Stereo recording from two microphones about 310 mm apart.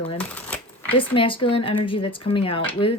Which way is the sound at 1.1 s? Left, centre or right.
Centre.